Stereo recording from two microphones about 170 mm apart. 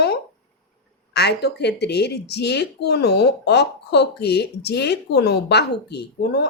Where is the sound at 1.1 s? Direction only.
75° left (ahead or behind).